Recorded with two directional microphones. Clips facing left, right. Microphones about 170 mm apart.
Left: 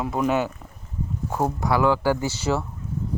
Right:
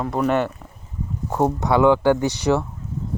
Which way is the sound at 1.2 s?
15° right (ahead or behind).